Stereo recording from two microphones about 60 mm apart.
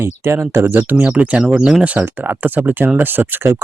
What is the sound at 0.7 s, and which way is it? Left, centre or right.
Speech, right.